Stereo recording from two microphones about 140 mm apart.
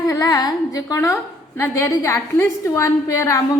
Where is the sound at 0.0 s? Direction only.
25° left (ahead or behind).